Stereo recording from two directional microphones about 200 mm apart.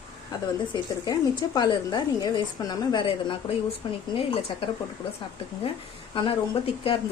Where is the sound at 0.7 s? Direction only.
20° left (ahead or behind).